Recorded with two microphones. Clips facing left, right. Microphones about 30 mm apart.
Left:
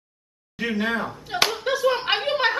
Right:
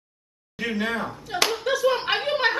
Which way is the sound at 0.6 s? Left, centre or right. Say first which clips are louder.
Left 2 dB; centre.